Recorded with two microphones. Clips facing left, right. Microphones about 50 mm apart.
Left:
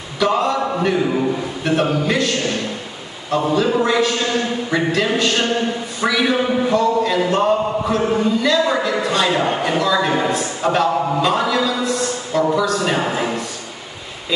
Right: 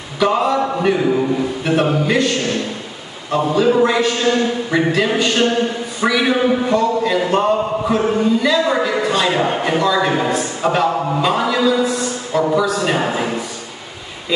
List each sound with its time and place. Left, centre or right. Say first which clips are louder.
0.2 s a man's voice: right 2 dB; centre
1.6 s a sound: even; centre
2.0 s a man's voice: right 2 dB; centre